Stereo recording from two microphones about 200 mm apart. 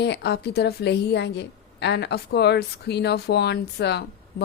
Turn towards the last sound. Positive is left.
turn(degrees=55)  # may be behind; listen again after turning